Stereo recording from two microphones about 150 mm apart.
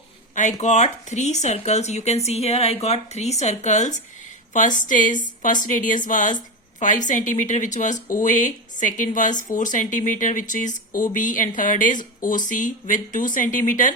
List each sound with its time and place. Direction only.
0.3 s speech: 55° left (ahead or behind)